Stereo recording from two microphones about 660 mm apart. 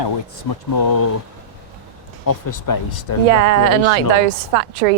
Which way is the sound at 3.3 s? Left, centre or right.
Right.